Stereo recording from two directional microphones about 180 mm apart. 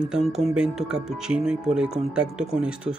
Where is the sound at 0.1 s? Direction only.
Centre (ahead or behind).